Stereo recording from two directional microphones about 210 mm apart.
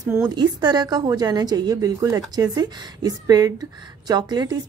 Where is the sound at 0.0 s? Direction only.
15° right (ahead or behind).